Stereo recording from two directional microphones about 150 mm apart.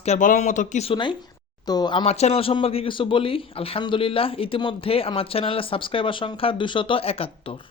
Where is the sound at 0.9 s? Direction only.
30° left (ahead or behind).